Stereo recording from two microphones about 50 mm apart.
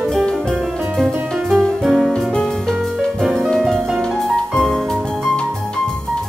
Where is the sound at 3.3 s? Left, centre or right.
Centre.